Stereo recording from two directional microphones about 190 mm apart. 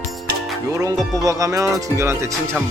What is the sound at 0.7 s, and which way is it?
Speech, 15° right (ahead or behind).